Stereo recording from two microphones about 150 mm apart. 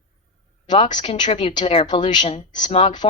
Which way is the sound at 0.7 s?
30° left (ahead or behind).